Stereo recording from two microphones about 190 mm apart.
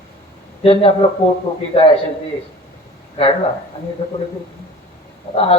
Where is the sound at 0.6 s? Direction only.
30° left (ahead or behind).